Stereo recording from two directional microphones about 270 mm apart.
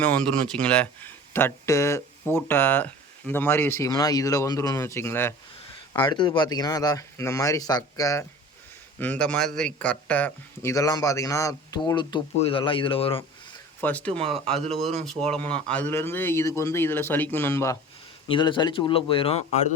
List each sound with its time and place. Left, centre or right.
0.0 s speech: centre
13.8 s speech: centre
14.1 s speech: right
15.0 s speech: centre; by 19.7 s left